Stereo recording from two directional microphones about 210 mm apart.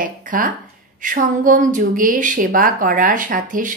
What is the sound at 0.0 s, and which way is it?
Speech, 40° right (ahead or behind).